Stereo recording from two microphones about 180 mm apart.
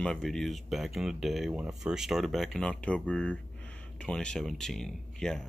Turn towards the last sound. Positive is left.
turn(degrees=5)  # may be behind; listen again after turning